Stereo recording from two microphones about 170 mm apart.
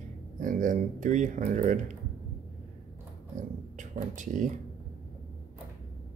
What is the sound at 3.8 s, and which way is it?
Speech, 50° right (ahead or behind).